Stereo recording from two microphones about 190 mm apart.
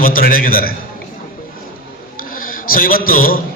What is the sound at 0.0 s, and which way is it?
Speech, 50° left (ahead or behind).